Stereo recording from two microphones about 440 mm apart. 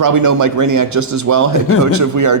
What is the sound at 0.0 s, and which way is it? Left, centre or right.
A man's voice, right.